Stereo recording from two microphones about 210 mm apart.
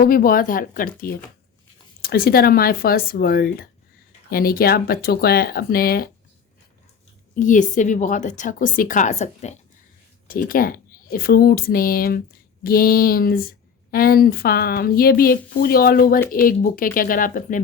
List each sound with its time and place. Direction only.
0.0 s a woman's voice: 40° left (ahead or behind)
7.3 s a woman's voice: 40° left (ahead or behind)